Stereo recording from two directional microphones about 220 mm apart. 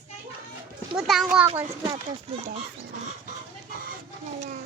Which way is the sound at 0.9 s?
Centre (ahead or behind).